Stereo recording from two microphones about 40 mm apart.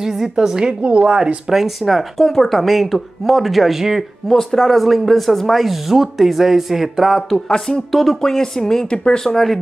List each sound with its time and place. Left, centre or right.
0.0 s a woman's voice: centre; by 1.4 s right
1.5 s speech: centre
4.3 s speech: centre
8.2 s speech: centre
9.2 s speech: centre